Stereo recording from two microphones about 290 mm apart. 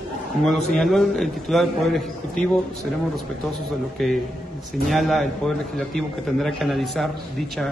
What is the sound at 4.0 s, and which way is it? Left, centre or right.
A man's voice, centre.